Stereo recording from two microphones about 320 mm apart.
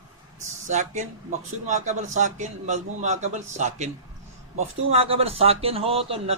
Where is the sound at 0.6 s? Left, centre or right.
Right.